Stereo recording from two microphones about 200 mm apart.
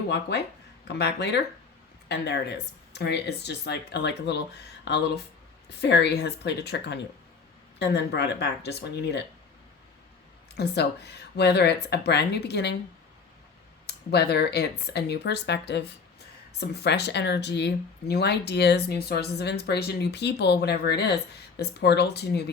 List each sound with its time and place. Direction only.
0.1 s speech: 55° left (ahead or behind)
10.5 s speech: 55° left (ahead or behind)
13.8 s speech: 55° left (ahead or behind)